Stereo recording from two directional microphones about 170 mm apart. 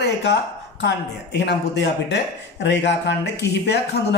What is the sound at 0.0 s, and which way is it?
Speech, 90° left.